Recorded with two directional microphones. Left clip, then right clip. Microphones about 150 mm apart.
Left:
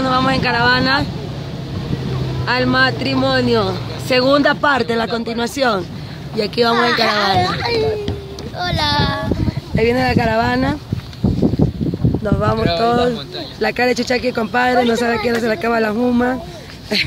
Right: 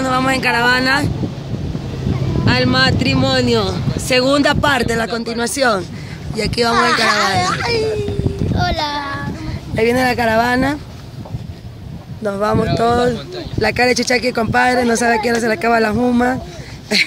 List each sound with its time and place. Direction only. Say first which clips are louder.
0.0 s speech: even; 5° right (ahead or behind)
2.4 s speech: even; centre (ahead or behind)
6.7 s speech: right 3 dB; 55° right (ahead or behind)
9.8 s speech: right 1 dB; 15° right (ahead or behind)
12.3 s speech: right 1 dB; 15° right (ahead or behind)